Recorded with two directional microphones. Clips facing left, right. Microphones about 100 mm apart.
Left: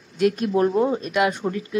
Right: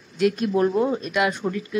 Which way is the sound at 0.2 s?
40° left (ahead or behind).